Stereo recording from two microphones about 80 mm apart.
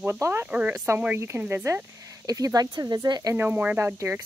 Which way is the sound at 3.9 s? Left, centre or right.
Right.